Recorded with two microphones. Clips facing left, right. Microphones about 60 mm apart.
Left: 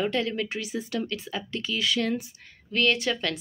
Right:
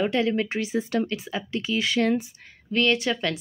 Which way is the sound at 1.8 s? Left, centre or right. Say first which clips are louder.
Right 3 dB; right.